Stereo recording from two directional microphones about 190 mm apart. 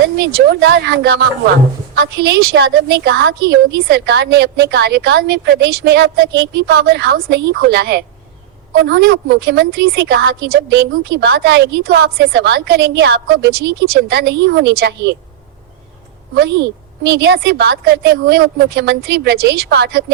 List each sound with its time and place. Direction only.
0.2 s a woman's voice: 65° right (ahead or behind)
16.3 s a woman's voice: 70° right (ahead or behind)